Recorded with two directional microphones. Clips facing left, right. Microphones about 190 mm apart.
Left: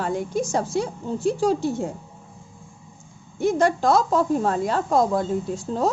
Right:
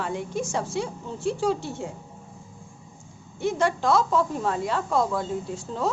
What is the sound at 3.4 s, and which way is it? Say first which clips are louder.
A woman's voice: left 4 dB; 45° left (ahead or behind).